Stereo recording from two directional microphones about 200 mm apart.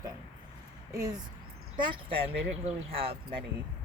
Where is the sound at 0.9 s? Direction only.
20° right (ahead or behind).